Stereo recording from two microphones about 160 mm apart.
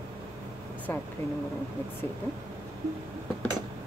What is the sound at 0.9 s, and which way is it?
Speech, 15° left (ahead or behind).